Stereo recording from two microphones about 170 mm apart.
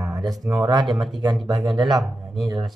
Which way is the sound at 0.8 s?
Centre (ahead or behind).